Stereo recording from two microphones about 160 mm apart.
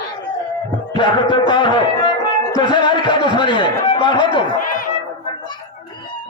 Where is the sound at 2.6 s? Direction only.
30° left (ahead or behind).